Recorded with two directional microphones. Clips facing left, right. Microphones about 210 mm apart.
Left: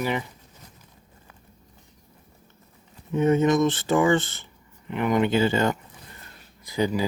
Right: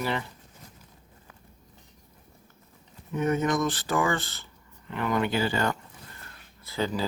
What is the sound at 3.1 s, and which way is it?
Speech, 25° left (ahead or behind).